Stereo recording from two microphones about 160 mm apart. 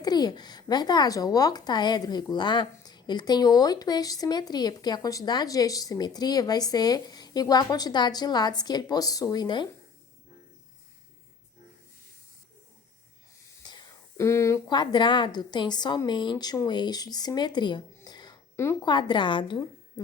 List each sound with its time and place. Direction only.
0.0 s speech: 25° left (ahead or behind)
14.2 s speech: 15° left (ahead or behind)
18.8 s speech: 25° left (ahead or behind)